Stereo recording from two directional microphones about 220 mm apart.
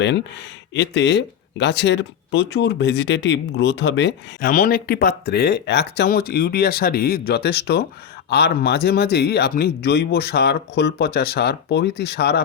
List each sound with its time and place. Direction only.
0.0 s speech: 55° left (ahead or behind)